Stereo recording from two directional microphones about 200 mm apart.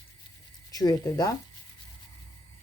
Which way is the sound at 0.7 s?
20° left (ahead or behind).